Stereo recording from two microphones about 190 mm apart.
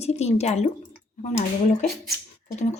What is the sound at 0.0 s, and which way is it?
A woman's voice, 35° left (ahead or behind).